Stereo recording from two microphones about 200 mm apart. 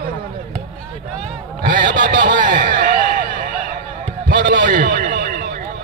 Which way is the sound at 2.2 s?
45° right (ahead or behind).